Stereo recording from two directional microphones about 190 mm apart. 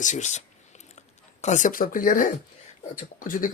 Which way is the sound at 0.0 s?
40° left (ahead or behind).